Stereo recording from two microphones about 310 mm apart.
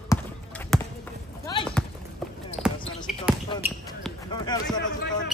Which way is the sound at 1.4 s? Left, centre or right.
Centre.